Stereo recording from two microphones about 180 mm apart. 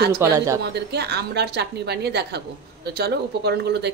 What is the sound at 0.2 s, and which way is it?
Speech, 15° right (ahead or behind).